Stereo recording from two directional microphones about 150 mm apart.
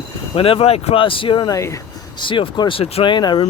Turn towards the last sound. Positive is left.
turn(degrees=30)  # may be behind; listen again after turning